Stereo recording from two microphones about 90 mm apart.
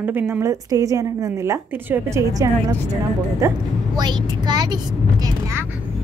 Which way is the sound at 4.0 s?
55° right (ahead or behind).